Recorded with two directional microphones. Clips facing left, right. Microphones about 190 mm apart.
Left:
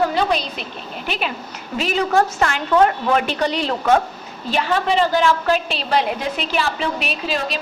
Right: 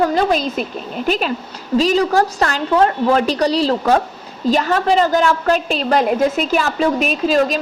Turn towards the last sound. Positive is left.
turn(degrees=-45)  # may be behind; listen again after turning